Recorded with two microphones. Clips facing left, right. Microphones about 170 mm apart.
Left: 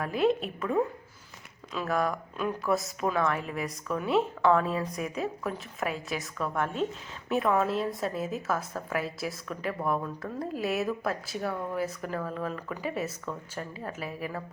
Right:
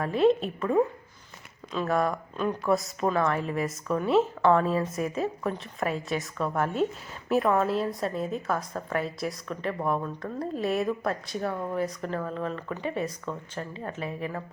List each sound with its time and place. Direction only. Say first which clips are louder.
0.0 s a woman's voice: right 4 dB; centre (ahead or behind)
7.3 s a woman's voice: right 2 dB; centre (ahead or behind)
11.5 s speech: right 2 dB; 10° right (ahead or behind)
11.8 s a woman's voice: right 2 dB; 5° left (ahead or behind)